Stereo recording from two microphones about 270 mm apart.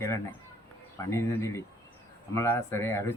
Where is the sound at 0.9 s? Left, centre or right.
Centre.